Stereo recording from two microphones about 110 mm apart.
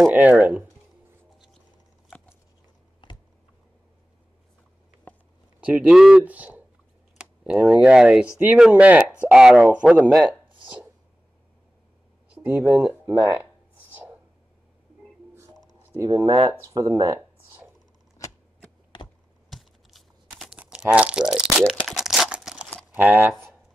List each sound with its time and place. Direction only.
0.1 s speech: 15° right (ahead or behind)
5.1 s a sound: 15° left (ahead or behind)
5.6 s speech: 10° right (ahead or behind)
10.6 s chopping: 15° right (ahead or behind)
12.4 s speech: 10° right (ahead or behind)
13.0 s speech: 20° right (ahead or behind)
15.3 s a sound: 25° right (ahead or behind)
16.6 s speech: 30° right (ahead or behind)
20.5 s crumpling: 10° right (ahead or behind)
22.9 s speech: 20° right (ahead or behind)